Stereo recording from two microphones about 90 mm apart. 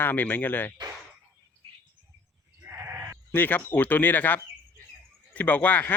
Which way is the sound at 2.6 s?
30° right (ahead or behind).